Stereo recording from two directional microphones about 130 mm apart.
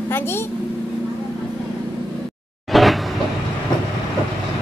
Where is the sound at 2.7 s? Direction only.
Centre (ahead or behind).